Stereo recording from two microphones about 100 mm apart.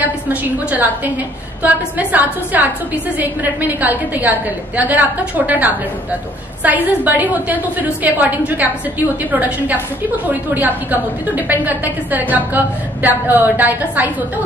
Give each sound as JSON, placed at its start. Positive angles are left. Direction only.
{"t": 0.3, "sound": "a woman's voice", "side_deg": -15}